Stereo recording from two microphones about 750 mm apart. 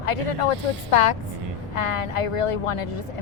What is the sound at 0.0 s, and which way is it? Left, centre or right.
Speech, left.